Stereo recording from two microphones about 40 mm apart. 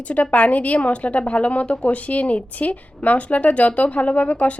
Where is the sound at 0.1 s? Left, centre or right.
Left.